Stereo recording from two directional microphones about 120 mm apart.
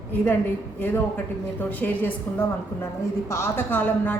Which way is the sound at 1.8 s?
15° left (ahead or behind).